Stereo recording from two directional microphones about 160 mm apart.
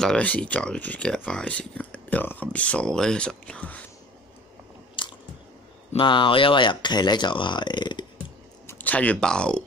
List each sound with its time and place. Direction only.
0.0 s speech: 5° left (ahead or behind)
5.0 s biting: 30° left (ahead or behind)
5.9 s speech: 30° left (ahead or behind)
8.6 s speech: 10° left (ahead or behind)